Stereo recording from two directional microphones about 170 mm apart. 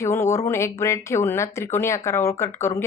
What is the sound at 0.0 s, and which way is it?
A woman's voice, 15° left (ahead or behind).